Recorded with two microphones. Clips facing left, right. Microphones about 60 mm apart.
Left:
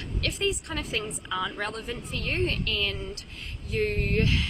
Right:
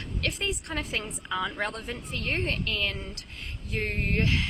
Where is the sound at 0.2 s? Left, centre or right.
Right.